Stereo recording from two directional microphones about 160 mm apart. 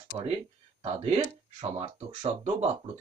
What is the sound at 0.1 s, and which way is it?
Speech, 30° right (ahead or behind).